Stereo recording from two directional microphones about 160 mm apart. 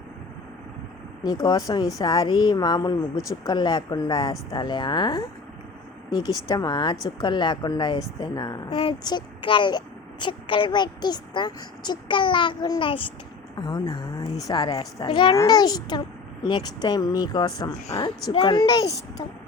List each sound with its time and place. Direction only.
1.2 s speech: 25° left (ahead or behind)
6.2 s a child's voice: 25° left (ahead or behind)